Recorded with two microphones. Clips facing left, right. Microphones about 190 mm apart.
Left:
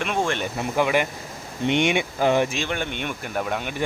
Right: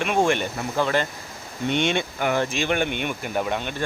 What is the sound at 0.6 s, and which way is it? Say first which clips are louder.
Speech: left 2 dB; 15° left (ahead or behind).